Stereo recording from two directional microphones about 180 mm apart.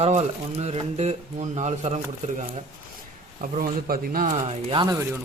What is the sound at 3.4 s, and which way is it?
Speech, 50° right (ahead or behind).